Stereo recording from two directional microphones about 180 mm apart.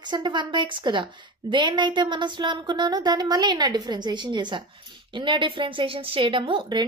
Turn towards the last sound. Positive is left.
turn(degrees=-30)  # may be behind; listen again after turning